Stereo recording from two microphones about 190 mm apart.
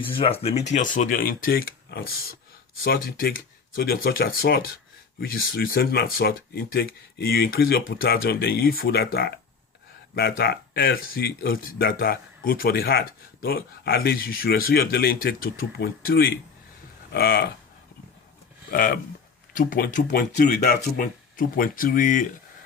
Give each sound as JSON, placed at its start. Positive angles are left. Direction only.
{"t": 0.0, "sound": "speech", "side_deg": 30}
{"t": 18.7, "sound": "speech", "side_deg": 45}
{"t": 20.1, "sound": "speech", "side_deg": 55}